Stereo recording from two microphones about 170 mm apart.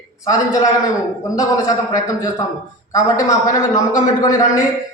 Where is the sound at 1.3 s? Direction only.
20° left (ahead or behind).